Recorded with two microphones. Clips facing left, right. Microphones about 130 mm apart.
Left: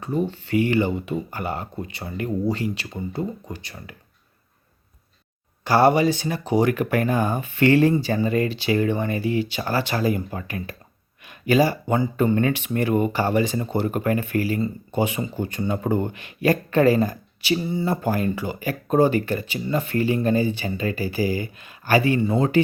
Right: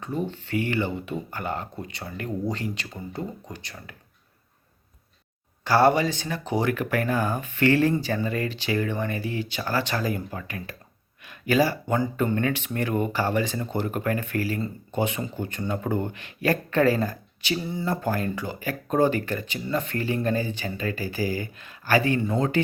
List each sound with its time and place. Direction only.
0.0 s speech: 10° left (ahead or behind)
5.6 s speech: 15° left (ahead or behind)